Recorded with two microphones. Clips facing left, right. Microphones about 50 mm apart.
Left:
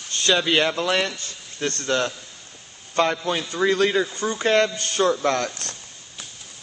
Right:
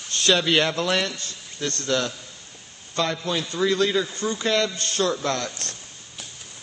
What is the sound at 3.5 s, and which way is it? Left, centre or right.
Speech, left.